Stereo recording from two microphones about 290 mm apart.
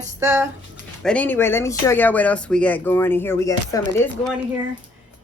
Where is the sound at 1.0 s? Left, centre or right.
Centre.